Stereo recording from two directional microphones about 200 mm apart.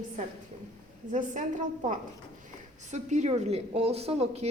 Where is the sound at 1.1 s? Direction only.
40° right (ahead or behind).